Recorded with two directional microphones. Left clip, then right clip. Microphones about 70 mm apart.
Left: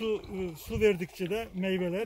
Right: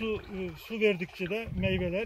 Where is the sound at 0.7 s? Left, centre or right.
Left.